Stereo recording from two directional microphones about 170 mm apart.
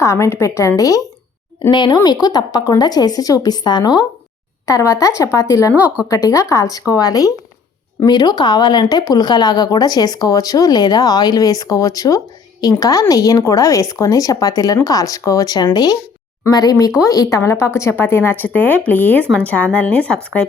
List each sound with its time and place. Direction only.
0.0 s speech: 15° left (ahead or behind)
5.7 s a woman's voice: 10° right (ahead or behind)
6.1 s speech: 20° left (ahead or behind)